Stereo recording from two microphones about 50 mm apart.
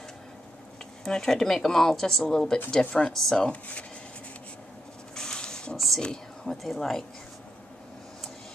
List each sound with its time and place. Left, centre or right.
1.0 s speech: centre
2.8 s speech: left
3.1 s speech: centre
3.3 s speech: left
5.1 s a sound: centre
5.9 s speech: centre